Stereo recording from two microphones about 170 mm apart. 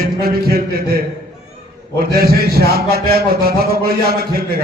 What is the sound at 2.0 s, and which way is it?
A man's voice, 65° right (ahead or behind).